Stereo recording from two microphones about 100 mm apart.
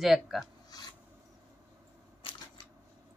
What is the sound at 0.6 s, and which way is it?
Filing, 40° left (ahead or behind).